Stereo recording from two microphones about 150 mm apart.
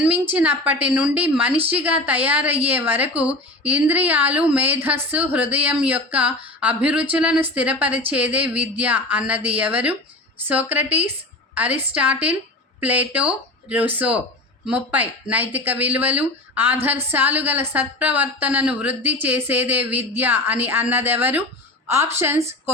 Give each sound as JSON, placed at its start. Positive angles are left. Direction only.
{"t": 0.3, "sound": "a woman's voice", "side_deg": -10}